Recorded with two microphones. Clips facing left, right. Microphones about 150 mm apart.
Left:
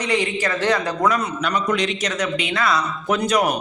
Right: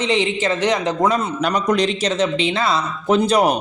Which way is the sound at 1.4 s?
40° right (ahead or behind).